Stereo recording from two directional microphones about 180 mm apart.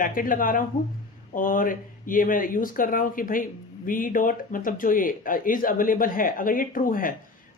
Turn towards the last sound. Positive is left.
turn(degrees=50)  # may be behind; listen again after turning